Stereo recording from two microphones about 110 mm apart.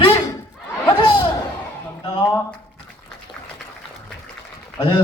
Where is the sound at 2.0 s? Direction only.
50° left (ahead or behind).